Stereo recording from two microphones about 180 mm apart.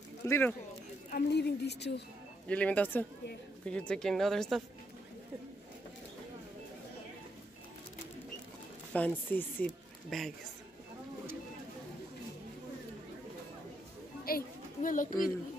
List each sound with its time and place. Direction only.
0.3 s speech: 10° left (ahead or behind)
1.3 s a woman's voice: 70° left (ahead or behind)
2.4 s speech: 5° left (ahead or behind)
8.9 s speech: 10° left (ahead or behind)
14.2 s a child's voice: 50° left (ahead or behind)